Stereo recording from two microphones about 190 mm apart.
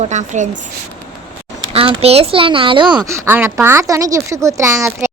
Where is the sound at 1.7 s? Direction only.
30° right (ahead or behind).